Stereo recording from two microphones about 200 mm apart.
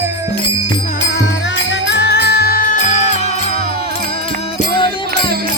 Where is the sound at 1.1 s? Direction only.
65° left (ahead or behind); by 2.8 s 45° left (ahead or behind).